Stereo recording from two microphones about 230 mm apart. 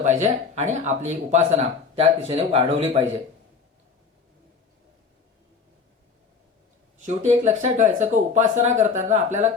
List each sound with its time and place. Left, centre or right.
0.0 s speech: right
7.3 s speech: right